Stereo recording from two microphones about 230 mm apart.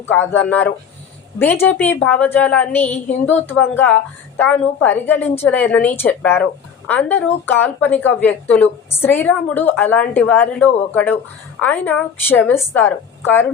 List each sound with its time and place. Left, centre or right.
0.1 s a woman's voice: centre